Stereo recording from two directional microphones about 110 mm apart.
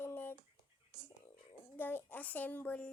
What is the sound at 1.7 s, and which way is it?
A child's voice, 20° left (ahead or behind).